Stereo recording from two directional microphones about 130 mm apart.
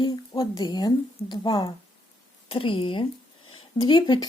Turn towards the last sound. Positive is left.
turn(degrees=35)  # may be behind; listen again after turning